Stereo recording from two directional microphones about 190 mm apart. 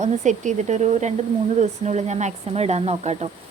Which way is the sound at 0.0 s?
40° right (ahead or behind).